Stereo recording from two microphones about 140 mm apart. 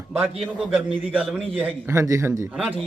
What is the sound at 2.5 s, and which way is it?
Speech, 10° right (ahead or behind).